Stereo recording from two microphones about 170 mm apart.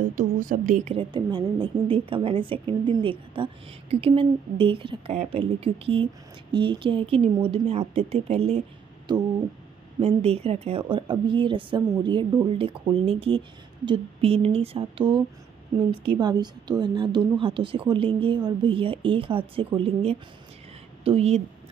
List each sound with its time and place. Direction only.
0.1 s speech: 50° right (ahead or behind)
0.9 s a woman's voice: 25° right (ahead or behind)